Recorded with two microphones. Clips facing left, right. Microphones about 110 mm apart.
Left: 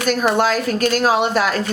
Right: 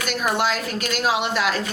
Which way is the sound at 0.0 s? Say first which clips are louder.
Left 6 dB; 40° left (ahead or behind).